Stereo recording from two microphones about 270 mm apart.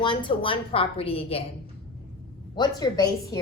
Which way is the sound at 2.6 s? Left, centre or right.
Centre.